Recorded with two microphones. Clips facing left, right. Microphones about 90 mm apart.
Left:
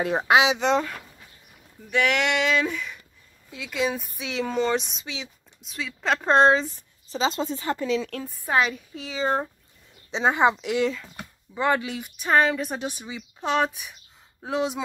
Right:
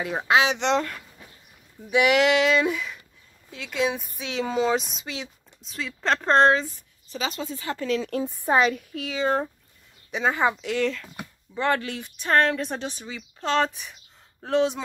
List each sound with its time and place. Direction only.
0.1 s a woman's voice: 20° left (ahead or behind)
0.5 s speech: 5° left (ahead or behind)
1.9 s speech: 10° right (ahead or behind)
6.1 s a woman's voice: 15° left (ahead or behind)
7.8 s speech: centre (ahead or behind)
8.1 s a woman's voice: 20° right (ahead or behind)
8.5 s speech: centre (ahead or behind)
8.9 s a woman's voice: 25° left (ahead or behind); by 14.8 s 5° left (ahead or behind)